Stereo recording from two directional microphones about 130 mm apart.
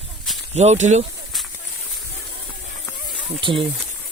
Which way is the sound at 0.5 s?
60° right (ahead or behind).